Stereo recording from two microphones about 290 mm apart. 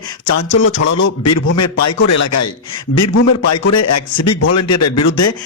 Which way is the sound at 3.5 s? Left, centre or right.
Left.